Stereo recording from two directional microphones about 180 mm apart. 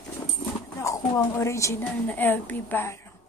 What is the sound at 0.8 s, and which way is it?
A woman's voice, 20° left (ahead or behind).